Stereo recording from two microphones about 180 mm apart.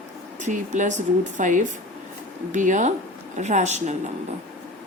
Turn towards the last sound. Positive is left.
turn(degrees=-40)  # may be behind; listen again after turning